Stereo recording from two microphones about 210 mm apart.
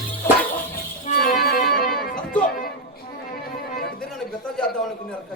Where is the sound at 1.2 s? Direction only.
45° left (ahead or behind).